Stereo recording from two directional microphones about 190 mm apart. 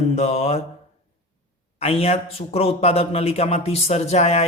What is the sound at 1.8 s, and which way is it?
A man's voice, 30° left (ahead or behind).